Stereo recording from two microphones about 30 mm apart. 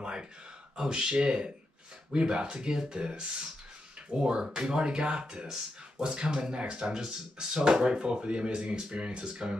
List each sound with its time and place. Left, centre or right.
0.0 s a sound: right
0.7 s speech: right
4.4 s speech: right
6.9 s speech: right